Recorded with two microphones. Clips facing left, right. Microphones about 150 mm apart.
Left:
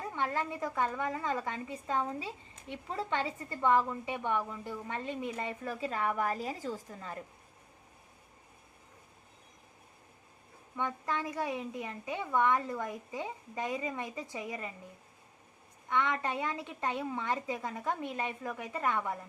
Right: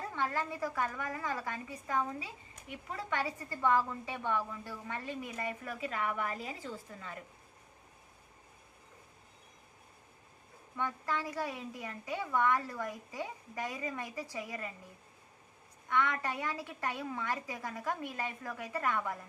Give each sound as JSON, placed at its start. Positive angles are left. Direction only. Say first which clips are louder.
{"t": 0.2, "sound": "a woman's voice", "louder": "left 1 dB", "side_deg": 20}
{"t": 10.8, "sound": "a woman's voice", "louder": "left 1 dB", "side_deg": 20}
{"t": 15.9, "sound": "a woman's voice", "louder": "left 1 dB", "side_deg": 20}